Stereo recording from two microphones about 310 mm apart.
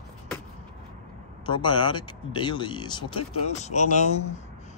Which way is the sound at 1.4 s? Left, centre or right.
Centre.